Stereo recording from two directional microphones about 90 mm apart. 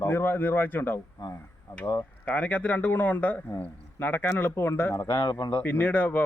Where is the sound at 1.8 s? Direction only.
40° left (ahead or behind).